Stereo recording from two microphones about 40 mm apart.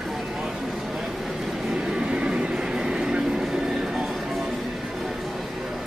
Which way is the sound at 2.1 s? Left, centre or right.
Right.